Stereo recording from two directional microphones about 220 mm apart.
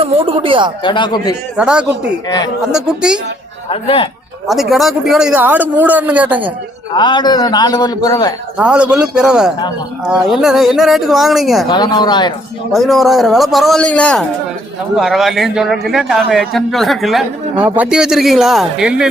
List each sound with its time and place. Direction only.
0.0 s speech: 25° right (ahead or behind)
0.8 s a man's voice: 20° left (ahead or behind)
1.5 s a man's voice: 5° right (ahead or behind)
3.7 s a man's voice: 25° left (ahead or behind)
4.4 s a man's voice: centre (ahead or behind)
6.9 s a man's voice: 20° left (ahead or behind)
8.5 s a man's voice: 5° right (ahead or behind)
11.7 s a man's voice: 20° left (ahead or behind)
12.7 s a man's voice: centre (ahead or behind)